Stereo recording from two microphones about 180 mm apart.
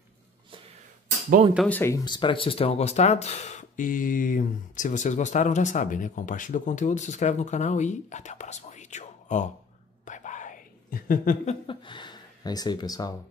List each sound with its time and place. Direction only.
1.7 s speech: 15° left (ahead or behind); by 9.5 s 40° left (ahead or behind)
10.0 s whispering: 45° left (ahead or behind)
11.6 s speech: 25° left (ahead or behind)